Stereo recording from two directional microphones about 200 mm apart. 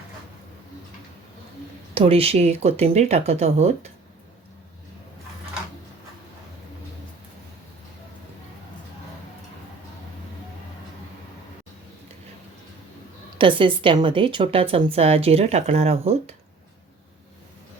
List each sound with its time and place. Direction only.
2.0 s speech: 30° right (ahead or behind)
13.4 s a woman's voice: 25° right (ahead or behind)